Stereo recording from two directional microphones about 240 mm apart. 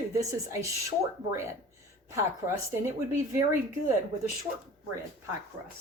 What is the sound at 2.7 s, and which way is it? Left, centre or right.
Speech, centre.